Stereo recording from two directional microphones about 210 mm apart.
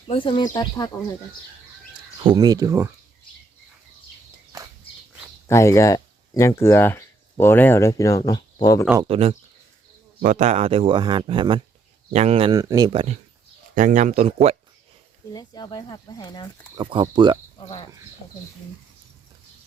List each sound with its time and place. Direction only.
0.1 s speech: 25° left (ahead or behind)
2.2 s speech: 20° right (ahead or behind)
5.5 s speech: 15° left (ahead or behind)
9.0 s speech: 30° right (ahead or behind)
13.7 s speech: 35° right (ahead or behind)
15.3 s speech: 20° left (ahead or behind)
16.7 s speech: 20° right (ahead or behind)